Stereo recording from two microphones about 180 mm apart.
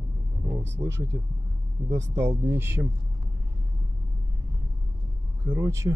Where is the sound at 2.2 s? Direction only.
15° right (ahead or behind).